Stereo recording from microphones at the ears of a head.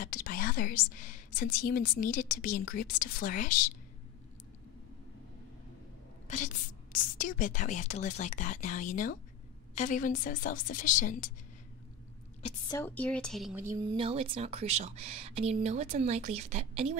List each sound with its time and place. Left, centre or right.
0.0 s a woman's voice: left
6.2 s a woman's voice: left
12.9 s a woman's voice: centre
14.2 s speech: right